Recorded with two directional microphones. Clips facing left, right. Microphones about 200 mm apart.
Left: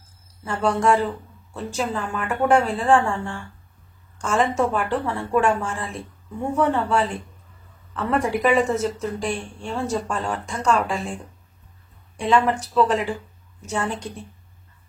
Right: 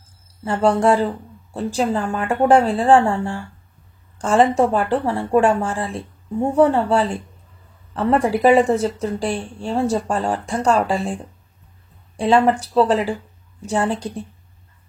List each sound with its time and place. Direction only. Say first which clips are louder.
0.4 s speech: right 5 dB; 30° right (ahead or behind)
12.2 s speech: right 4 dB; 30° right (ahead or behind)